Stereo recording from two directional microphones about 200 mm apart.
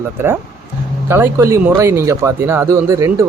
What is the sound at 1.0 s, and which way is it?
Speech, 10° right (ahead or behind).